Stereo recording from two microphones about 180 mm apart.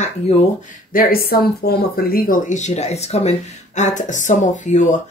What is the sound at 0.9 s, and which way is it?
Speech, 55° left (ahead or behind).